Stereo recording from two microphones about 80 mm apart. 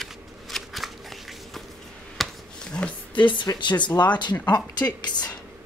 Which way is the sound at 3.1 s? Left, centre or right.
Left.